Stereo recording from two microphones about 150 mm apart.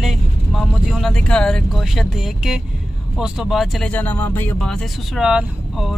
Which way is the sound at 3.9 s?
10° left (ahead or behind).